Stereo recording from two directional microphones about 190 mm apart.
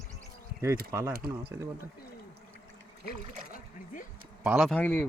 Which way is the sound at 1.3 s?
15° right (ahead or behind).